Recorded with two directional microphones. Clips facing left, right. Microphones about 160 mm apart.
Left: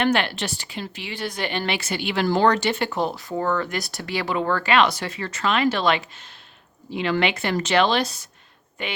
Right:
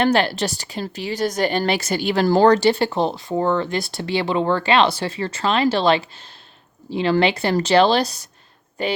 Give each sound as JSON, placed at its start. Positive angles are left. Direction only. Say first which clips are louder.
{"t": 0.0, "sound": "a woman's voice", "louder": "right 4 dB", "side_deg": -35}